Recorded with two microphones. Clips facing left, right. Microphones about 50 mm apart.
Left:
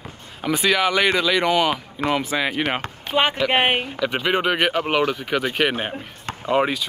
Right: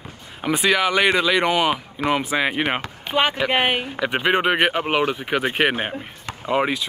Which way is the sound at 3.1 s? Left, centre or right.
Right.